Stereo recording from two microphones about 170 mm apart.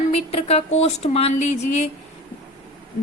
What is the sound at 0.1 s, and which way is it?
Speech, 35° left (ahead or behind).